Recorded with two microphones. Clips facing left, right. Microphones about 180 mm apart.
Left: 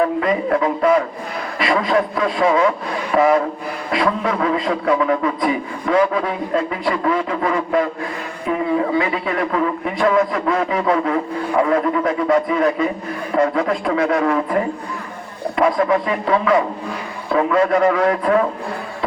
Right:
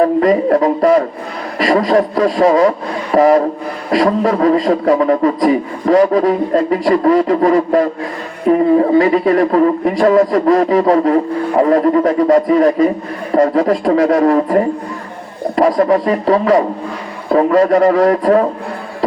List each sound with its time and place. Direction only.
0.0 s speech: 40° right (ahead or behind)